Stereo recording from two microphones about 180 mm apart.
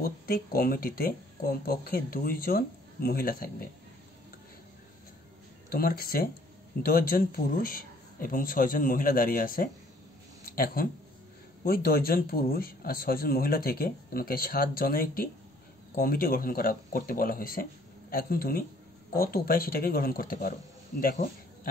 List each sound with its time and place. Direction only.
0.0 s a man's voice: 55° left (ahead or behind)
5.7 s a man's voice: 55° left (ahead or behind)